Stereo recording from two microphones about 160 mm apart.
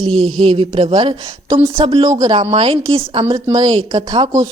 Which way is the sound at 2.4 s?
35° right (ahead or behind).